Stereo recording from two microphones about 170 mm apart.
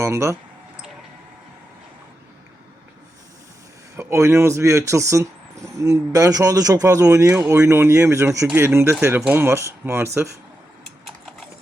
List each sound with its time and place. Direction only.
0.0 s speech: 15° right (ahead or behind)
3.9 s speech: 15° right (ahead or behind)